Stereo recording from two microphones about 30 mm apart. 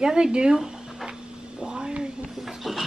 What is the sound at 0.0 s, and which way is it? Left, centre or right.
Speech, right.